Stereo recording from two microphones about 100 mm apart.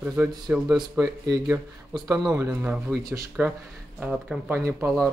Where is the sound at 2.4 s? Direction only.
25° right (ahead or behind).